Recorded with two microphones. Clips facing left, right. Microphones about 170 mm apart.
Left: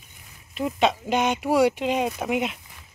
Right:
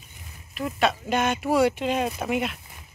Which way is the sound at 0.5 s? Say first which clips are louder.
Left 2 dB; 20° left (ahead or behind).